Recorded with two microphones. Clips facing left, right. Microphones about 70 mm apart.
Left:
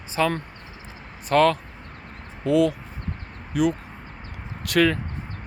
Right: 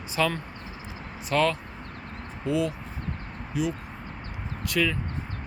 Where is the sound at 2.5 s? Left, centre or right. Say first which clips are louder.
Left 7 dB; left.